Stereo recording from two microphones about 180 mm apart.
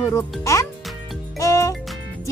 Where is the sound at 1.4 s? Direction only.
15° left (ahead or behind).